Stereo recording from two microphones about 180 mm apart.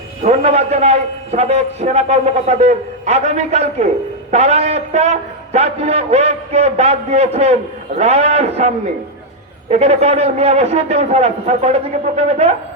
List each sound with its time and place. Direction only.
0.2 s a man's voice: 35° right (ahead or behind)